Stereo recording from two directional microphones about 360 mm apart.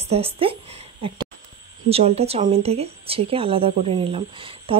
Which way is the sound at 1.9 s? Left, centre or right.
Centre.